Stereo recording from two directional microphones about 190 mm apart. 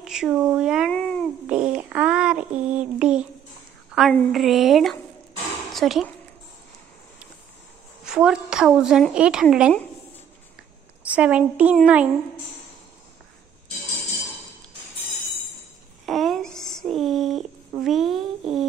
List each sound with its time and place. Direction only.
0.0 s a woman's voice: 5° right (ahead or behind)
0.9 s babbling: 5° left (ahead or behind)
1.5 s a sound: 5° right (ahead or behind)
3.0 s a woman's voice: 5° right (ahead or behind)
8.0 s a woman's voice: 5° right (ahead or behind)
11.1 s a woman's voice: 5° right (ahead or behind)
16.1 s a sound: centre (ahead or behind)